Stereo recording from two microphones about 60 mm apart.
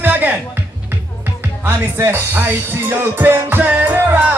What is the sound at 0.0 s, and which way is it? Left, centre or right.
Music, right.